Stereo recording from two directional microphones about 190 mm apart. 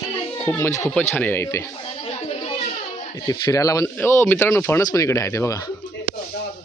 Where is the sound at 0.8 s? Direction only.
5° left (ahead or behind).